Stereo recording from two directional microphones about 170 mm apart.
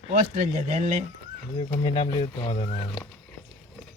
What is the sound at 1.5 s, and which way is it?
Speech, 30° left (ahead or behind).